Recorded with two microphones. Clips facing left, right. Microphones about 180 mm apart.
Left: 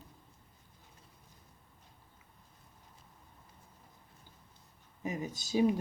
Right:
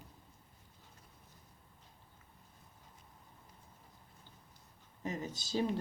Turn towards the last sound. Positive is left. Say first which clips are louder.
# left 6 dB
turn(degrees=10)  # may be behind; listen again after turning